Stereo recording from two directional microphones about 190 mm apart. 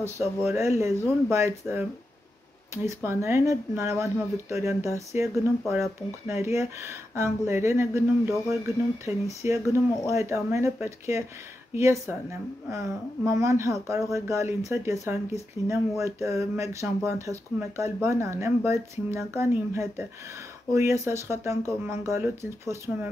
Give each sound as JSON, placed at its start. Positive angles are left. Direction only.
{"t": 0.0, "sound": "speech", "side_deg": -15}